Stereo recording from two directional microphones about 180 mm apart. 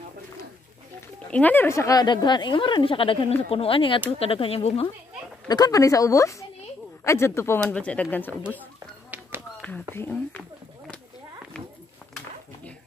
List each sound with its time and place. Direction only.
1.3 s a woman's voice: 10° left (ahead or behind); by 4.8 s 35° left (ahead or behind)
5.5 s a woman's voice: 20° left (ahead or behind)
9.1 s tap: 10° right (ahead or behind)
9.9 s speech: 10° left (ahead or behind)